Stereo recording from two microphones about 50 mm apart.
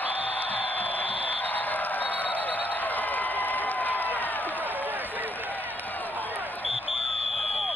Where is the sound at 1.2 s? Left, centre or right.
Left.